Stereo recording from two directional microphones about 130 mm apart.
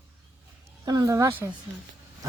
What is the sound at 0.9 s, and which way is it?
Speech, 25° right (ahead or behind).